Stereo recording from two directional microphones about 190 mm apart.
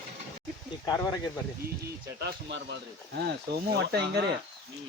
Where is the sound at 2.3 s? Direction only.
65° right (ahead or behind).